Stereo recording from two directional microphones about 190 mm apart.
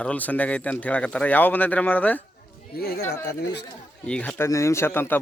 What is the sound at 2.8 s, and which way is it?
Speech, 55° left (ahead or behind).